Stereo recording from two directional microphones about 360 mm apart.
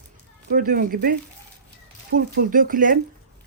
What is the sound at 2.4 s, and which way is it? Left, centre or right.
Speech, right.